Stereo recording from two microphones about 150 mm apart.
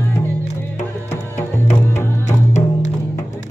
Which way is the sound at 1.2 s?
15° left (ahead or behind).